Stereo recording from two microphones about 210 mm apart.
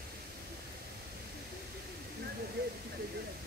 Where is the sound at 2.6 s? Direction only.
50° right (ahead or behind).